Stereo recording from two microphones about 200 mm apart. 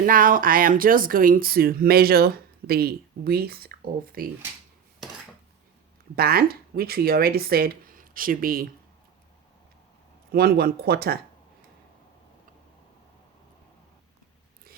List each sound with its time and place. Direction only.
0.0 s speech: 45° right (ahead or behind)
6.1 s speech: 50° right (ahead or behind)
10.3 s speech: 50° right (ahead or behind)